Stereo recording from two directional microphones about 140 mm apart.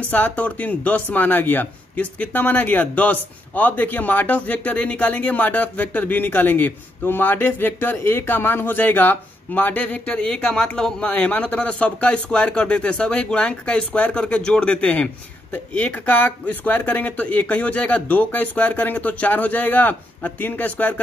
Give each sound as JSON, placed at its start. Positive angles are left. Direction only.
{"t": 0.1, "sound": "speech", "side_deg": 10}